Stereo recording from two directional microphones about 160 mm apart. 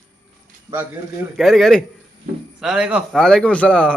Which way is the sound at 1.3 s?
Centre (ahead or behind).